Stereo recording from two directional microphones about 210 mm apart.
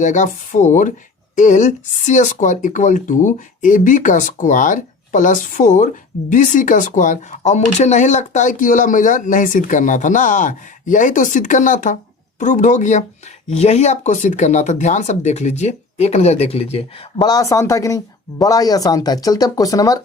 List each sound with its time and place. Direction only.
0.0 s speech: 35° left (ahead or behind); by 20.0 s 15° left (ahead or behind)